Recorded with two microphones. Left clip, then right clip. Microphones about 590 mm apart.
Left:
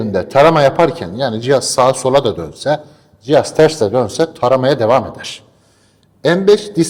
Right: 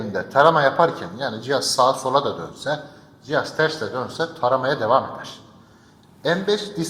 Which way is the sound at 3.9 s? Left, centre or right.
Left.